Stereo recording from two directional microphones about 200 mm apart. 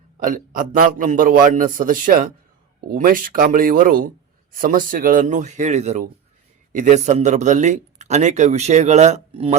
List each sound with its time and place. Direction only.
0.3 s a man's voice: 45° right (ahead or behind)